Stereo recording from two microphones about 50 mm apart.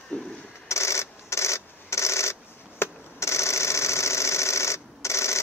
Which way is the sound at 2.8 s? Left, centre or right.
Left.